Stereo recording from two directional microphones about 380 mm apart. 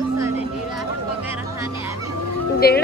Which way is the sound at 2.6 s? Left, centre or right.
Left.